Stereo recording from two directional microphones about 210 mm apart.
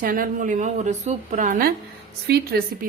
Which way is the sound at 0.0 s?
40° right (ahead or behind).